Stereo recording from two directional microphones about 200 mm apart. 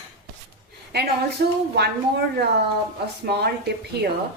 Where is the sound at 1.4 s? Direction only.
50° right (ahead or behind).